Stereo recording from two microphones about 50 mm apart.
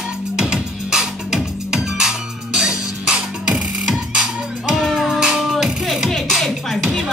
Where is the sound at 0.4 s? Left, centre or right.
Centre.